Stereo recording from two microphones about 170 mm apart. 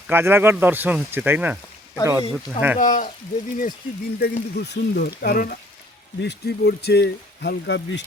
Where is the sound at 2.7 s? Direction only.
50° left (ahead or behind).